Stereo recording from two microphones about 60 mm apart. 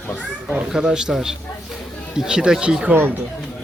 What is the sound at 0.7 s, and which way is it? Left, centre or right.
Speech, centre.